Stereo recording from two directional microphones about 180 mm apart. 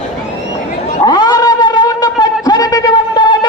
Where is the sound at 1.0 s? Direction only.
20° left (ahead or behind).